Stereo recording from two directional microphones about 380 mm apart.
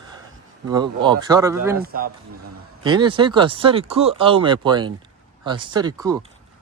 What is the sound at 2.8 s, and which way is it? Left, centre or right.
Speech, centre.